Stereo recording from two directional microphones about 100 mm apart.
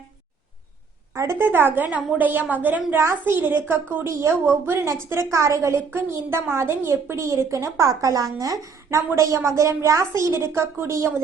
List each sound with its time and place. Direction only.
1.1 s a woman's voice: 30° right (ahead or behind)